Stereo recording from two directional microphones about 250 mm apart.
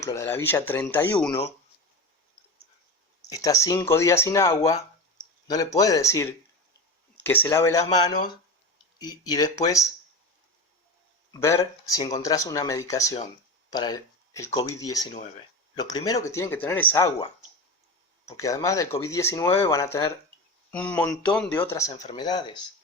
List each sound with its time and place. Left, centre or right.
0.0 s speech: centre
3.2 s speech: centre
9.0 s speech: centre
11.3 s speech: centre
18.3 s speech: centre